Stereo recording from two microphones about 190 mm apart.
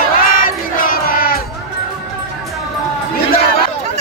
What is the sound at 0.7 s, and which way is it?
Battle cry, 50° left (ahead or behind).